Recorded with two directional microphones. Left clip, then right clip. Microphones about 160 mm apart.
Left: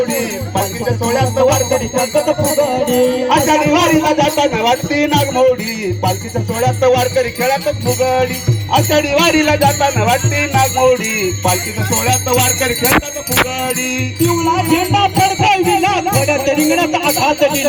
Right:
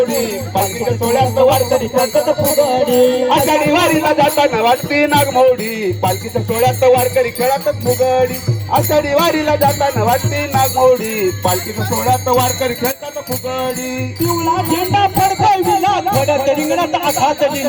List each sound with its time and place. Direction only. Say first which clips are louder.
0.2 s music: right 1 dB; 10° right (ahead or behind)
2.6 s music: right 2 dB; 15° right (ahead or behind)
12.0 s jingle bell: right 2 dB; 20° left (ahead or behind)
14.5 s music: left 1 dB; 5° right (ahead or behind); by 17.7 s 45° right (ahead or behind)